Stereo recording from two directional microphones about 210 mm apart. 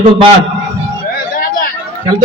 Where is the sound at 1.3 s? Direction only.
45° left (ahead or behind).